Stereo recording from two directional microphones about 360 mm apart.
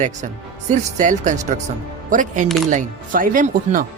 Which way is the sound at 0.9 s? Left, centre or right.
Right.